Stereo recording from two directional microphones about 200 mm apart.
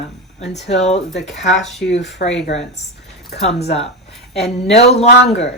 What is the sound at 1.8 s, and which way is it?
Speech, 55° left (ahead or behind).